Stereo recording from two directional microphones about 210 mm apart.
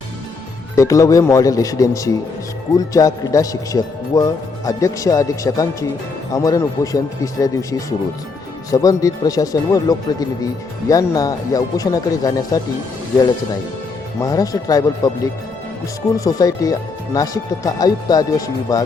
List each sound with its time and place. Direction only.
0.8 s speech: 15° left (ahead or behind)
14.2 s speech: 15° left (ahead or behind)